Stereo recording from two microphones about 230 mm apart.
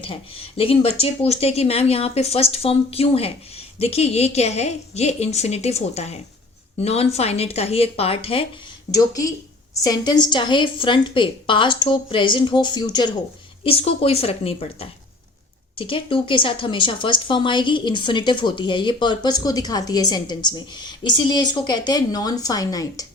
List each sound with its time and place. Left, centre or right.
0.0 s speech: left